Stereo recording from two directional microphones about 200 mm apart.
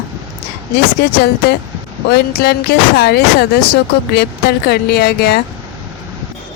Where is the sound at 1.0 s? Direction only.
50° left (ahead or behind).